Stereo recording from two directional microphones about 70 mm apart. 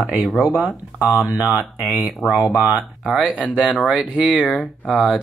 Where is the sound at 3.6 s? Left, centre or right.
Centre.